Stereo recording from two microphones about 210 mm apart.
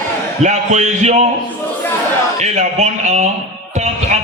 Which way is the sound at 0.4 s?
35° right (ahead or behind).